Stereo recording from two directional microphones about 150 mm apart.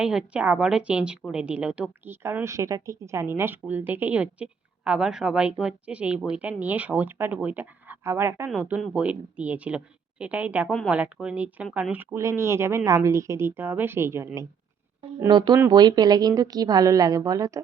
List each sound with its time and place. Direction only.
0.0 s a woman's voice: 5° right (ahead or behind)
15.3 s a woman's voice: 30° right (ahead or behind)